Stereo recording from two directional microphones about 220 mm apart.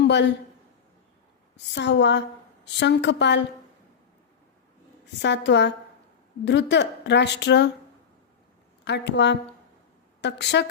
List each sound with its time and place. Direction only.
0.0 s a woman's voice: 50° left (ahead or behind)
1.5 s a woman's voice: 50° left (ahead or behind)
5.2 s a woman's voice: 55° left (ahead or behind)
8.8 s a woman's voice: 50° left (ahead or behind)